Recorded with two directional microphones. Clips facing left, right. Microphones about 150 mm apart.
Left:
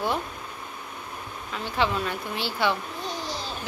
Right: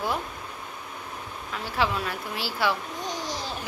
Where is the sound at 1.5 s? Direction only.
5° right (ahead or behind).